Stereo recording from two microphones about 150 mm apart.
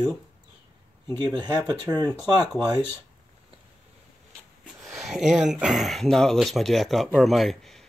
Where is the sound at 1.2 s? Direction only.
25° right (ahead or behind).